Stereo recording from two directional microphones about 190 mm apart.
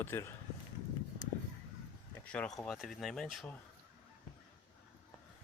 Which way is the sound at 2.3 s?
5° left (ahead or behind).